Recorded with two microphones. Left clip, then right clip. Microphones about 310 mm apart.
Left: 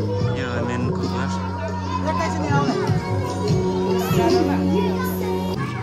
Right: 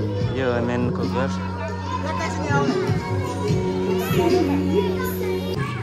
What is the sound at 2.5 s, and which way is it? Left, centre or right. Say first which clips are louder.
Speech: right 2 dB; left.